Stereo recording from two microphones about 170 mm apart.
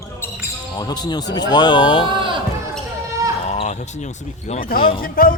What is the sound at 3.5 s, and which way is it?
Speech, 40° left (ahead or behind).